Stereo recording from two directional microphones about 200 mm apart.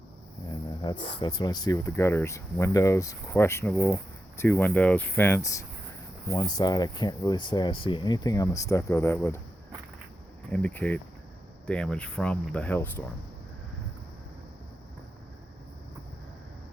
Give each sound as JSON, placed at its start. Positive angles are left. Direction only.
{"t": 0.9, "sound": "speech", "side_deg": 25}
{"t": 10.5, "sound": "speech", "side_deg": 5}